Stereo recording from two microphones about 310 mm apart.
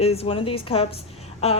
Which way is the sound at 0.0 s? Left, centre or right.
Centre.